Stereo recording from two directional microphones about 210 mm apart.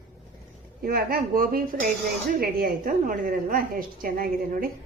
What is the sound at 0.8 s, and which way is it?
A woman's voice, 45° right (ahead or behind).